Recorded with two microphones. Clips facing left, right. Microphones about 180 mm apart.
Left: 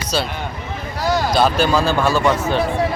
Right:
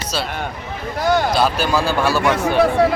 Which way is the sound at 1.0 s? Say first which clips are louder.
Right 3 dB; 55° right (ahead or behind).